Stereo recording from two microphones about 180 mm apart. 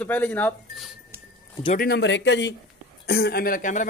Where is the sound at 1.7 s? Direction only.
60° left (ahead or behind); by 2.5 s 80° left.